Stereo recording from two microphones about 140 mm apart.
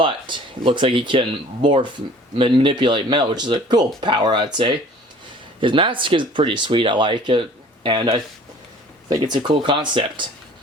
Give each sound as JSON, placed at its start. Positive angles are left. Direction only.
{"t": 0.0, "sound": "speech", "side_deg": -35}
{"t": 5.5, "sound": "speech", "side_deg": -40}